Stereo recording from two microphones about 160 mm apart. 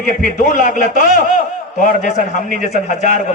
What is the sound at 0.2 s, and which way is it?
A man's voice, 55° left (ahead or behind).